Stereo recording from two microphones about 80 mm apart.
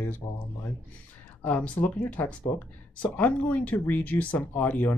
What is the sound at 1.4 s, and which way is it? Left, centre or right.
Speech, left.